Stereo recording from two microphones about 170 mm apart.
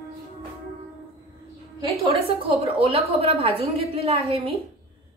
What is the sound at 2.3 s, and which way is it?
A woman's voice, 35° right (ahead or behind).